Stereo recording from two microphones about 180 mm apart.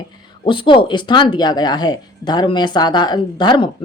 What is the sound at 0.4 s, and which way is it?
A woman's voice, 30° left (ahead or behind).